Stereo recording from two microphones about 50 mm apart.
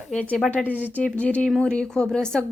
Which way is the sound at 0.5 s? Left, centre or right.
Left.